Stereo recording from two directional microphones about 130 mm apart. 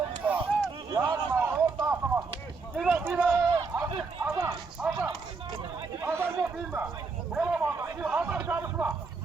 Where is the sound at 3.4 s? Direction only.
25° right (ahead or behind).